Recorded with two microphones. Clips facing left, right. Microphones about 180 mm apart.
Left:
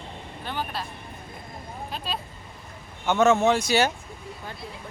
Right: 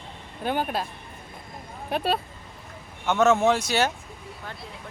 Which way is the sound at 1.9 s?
60° right (ahead or behind).